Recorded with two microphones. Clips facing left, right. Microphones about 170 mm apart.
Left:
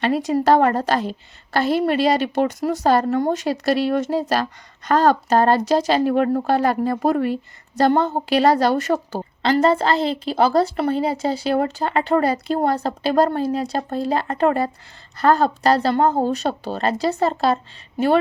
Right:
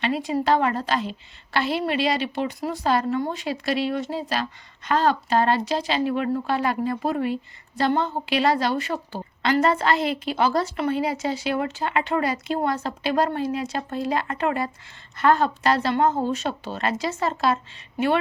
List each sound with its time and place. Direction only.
0.0 s speech: 40° left (ahead or behind)
9.4 s a woman's voice: 30° left (ahead or behind)